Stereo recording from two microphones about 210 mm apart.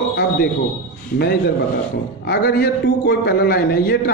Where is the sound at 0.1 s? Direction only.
50° left (ahead or behind).